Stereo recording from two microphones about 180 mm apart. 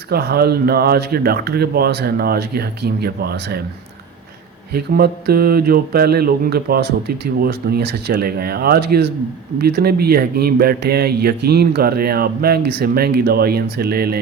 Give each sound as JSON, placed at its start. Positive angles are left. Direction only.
{"t": 0.1, "sound": "speech", "side_deg": -60}
{"t": 4.7, "sound": "speech", "side_deg": -60}